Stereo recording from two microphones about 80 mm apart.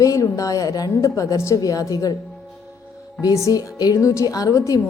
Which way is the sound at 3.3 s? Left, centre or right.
Left.